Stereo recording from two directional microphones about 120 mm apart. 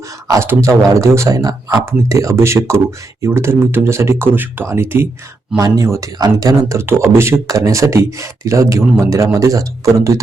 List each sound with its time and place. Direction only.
0.3 s a man's voice: 25° right (ahead or behind)